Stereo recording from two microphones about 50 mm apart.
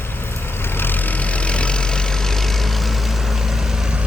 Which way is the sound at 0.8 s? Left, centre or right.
Left.